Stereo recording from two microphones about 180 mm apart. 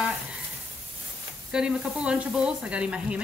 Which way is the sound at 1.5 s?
5° right (ahead or behind).